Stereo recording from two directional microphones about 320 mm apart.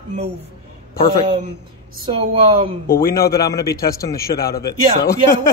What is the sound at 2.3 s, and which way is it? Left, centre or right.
Speech, centre.